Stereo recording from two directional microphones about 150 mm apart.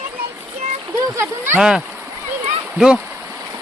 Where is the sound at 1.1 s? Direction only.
15° right (ahead or behind).